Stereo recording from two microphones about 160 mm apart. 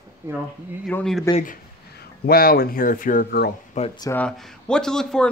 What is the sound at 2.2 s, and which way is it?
Speech, 70° left (ahead or behind).